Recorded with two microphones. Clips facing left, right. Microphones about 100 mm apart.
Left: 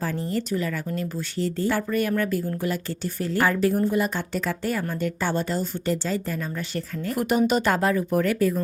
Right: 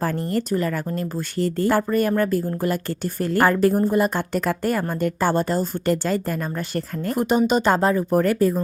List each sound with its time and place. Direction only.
0.0 s a woman's voice: 50° right (ahead or behind)
7.2 s speech: 25° right (ahead or behind)